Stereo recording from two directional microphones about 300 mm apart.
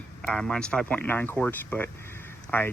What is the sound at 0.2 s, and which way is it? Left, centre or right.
Speech, centre.